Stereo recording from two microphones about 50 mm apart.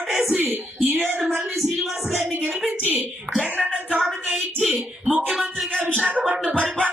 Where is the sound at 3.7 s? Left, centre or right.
Right.